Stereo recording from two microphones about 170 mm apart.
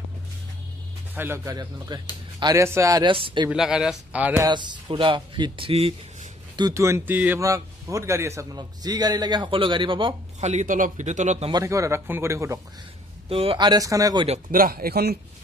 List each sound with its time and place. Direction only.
1.1 s a man's voice: 15° right (ahead or behind); by 3.4 s 30° right (ahead or behind)
3.4 s speech: 5° right (ahead or behind)
4.5 s a man's voice: 25° right (ahead or behind)
6.5 s a man's voice: 20° right (ahead or behind)
10.4 s a man's voice: 45° right (ahead or behind)
11.5 s speech: 20° right (ahead or behind)
13.3 s a man's voice: 35° right (ahead or behind)
14.5 s speech: 60° right (ahead or behind)